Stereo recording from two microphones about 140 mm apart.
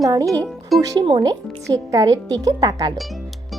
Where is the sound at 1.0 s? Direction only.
35° right (ahead or behind).